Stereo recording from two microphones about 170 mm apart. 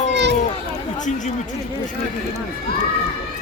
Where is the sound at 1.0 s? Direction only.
45° left (ahead or behind).